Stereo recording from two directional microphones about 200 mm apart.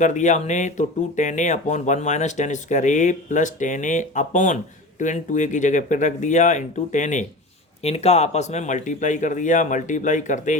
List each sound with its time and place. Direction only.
0.0 s speech: 35° left (ahead or behind)